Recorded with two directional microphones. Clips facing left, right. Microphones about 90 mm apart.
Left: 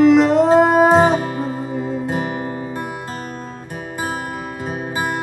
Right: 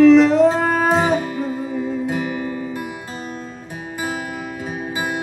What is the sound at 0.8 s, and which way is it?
Music, 35° left (ahead or behind).